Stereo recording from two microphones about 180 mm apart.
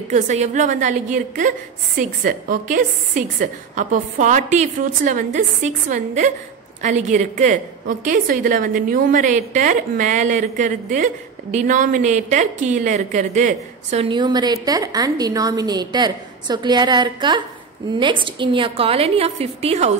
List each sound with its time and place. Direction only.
0.1 s a woman's voice: 40° right (ahead or behind)
14.0 s a woman's voice: 25° right (ahead or behind)